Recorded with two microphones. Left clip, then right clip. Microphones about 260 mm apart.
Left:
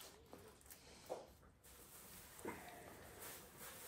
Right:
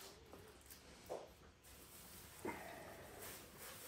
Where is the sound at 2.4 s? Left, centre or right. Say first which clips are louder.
Right 3 dB; centre.